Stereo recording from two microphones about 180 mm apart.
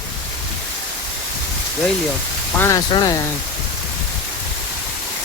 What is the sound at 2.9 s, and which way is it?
Speech, 25° left (ahead or behind).